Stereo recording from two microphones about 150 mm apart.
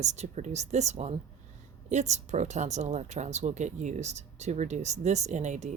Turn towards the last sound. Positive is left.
turn(degrees=-50)  # may be behind; listen again after turning